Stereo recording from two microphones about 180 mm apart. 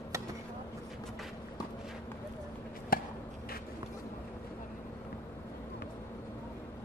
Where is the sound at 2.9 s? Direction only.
55° left (ahead or behind).